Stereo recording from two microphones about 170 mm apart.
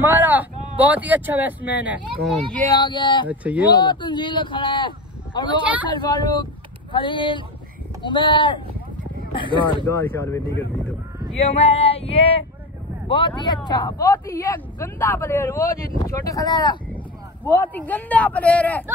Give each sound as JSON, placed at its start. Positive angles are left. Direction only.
{"t": 0.0, "sound": "speech", "side_deg": -10}
{"t": 2.8, "sound": "a man's voice", "side_deg": 25}
{"t": 3.3, "sound": "speech", "side_deg": -10}
{"t": 3.7, "sound": "a man's voice", "side_deg": 25}
{"t": 9.8, "sound": "speech", "side_deg": 15}
{"t": 11.4, "sound": "female singing", "side_deg": 35}
{"t": 13.7, "sound": "a man's voice", "side_deg": 25}
{"t": 17.5, "sound": "speech", "side_deg": 10}